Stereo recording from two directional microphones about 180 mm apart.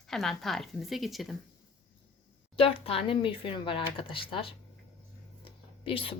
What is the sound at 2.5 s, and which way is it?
A woman's voice, 30° left (ahead or behind).